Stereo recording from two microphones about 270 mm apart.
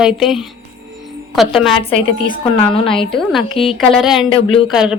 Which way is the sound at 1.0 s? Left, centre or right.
Centre.